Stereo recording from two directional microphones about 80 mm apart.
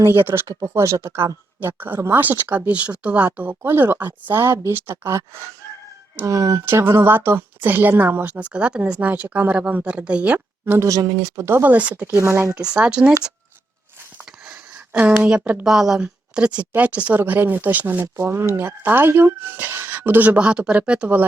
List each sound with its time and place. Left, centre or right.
0.0 s a woman's voice: right
1.6 s a woman's voice: right
10.7 s speech: right
11.5 s a woman's voice: right
12.1 s speech: right
12.5 s a woman's voice: centre
14.4 s a sound: centre
15.6 s a woman's voice: centre
18.0 s a woman's voice: right; by 21.2 s centre